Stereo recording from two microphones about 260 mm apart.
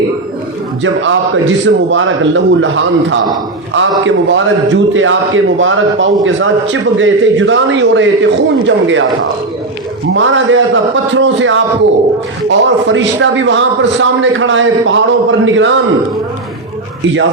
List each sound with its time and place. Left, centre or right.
0.8 s a man's voice: right
10.2 s a man's voice: right